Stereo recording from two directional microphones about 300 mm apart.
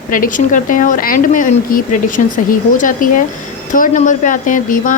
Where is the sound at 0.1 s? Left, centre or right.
Left.